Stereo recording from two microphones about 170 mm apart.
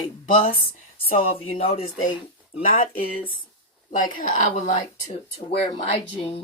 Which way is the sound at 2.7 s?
55° left (ahead or behind).